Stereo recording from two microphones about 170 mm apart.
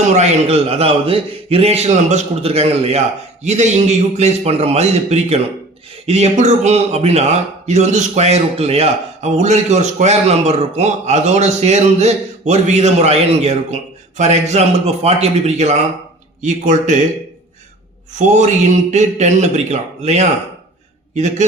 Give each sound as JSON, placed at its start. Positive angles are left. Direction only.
{"t": 0.1, "sound": "a man's voice", "side_deg": -40}
{"t": 18.1, "sound": "a man's voice", "side_deg": -45}